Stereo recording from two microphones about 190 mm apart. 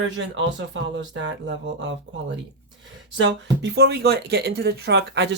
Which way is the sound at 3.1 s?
80° right.